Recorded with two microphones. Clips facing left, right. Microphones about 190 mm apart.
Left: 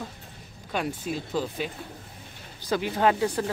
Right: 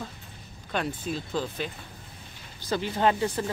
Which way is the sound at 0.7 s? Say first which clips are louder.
Left 1 dB; 10° left (ahead or behind).